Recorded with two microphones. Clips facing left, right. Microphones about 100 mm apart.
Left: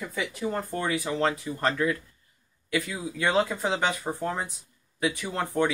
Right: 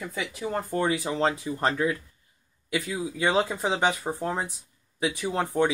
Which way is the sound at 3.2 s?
15° right (ahead or behind).